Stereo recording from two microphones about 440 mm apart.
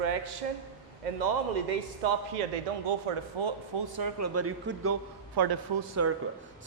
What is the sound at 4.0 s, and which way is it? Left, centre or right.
Speech, right.